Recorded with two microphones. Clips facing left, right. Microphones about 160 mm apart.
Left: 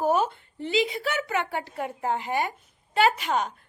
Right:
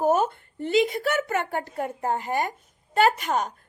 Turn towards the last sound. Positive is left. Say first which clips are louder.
# right 1 dB
turn(degrees=-45)  # may be behind; listen again after turning